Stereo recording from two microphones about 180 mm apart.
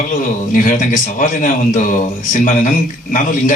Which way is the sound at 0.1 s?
50° left (ahead or behind).